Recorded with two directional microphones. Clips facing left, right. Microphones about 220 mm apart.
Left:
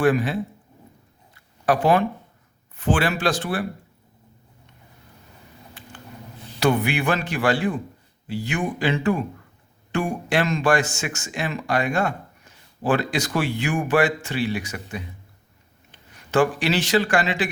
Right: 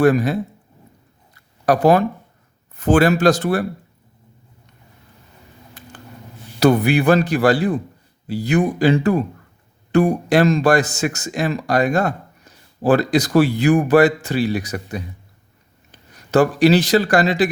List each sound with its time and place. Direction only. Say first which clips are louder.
0.0 s speech: right 5 dB; 40° right (ahead or behind)
1.6 s speech: right 5 dB; 40° right (ahead or behind)
5.8 s a sound: right 3 dB; 40° right (ahead or behind)
6.6 s speech: right 6 dB; 40° right (ahead or behind)